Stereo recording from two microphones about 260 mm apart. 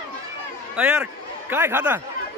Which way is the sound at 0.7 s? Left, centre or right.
Centre.